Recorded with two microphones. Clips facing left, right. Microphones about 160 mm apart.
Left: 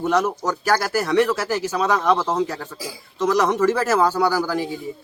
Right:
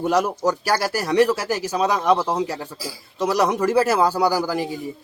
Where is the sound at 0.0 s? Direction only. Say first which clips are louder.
Right 1 dB; 10° right (ahead or behind).